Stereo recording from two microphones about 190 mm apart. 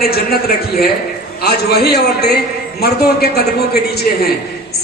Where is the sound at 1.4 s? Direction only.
55° left (ahead or behind).